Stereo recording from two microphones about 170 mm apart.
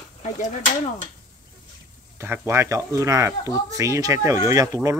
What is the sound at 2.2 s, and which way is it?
Speech, 15° right (ahead or behind).